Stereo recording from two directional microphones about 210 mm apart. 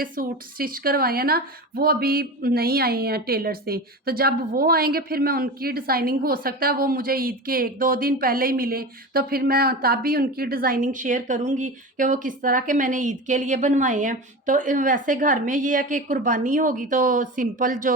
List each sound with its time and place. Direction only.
0.0 s speech: 45° right (ahead or behind)